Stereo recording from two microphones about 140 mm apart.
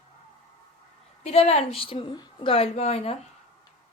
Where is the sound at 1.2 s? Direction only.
45° left (ahead or behind).